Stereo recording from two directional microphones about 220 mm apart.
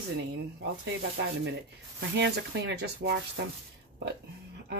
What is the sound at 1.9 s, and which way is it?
Speech, 50° right (ahead or behind).